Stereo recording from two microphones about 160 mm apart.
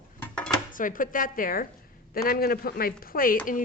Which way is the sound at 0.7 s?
55° left (ahead or behind).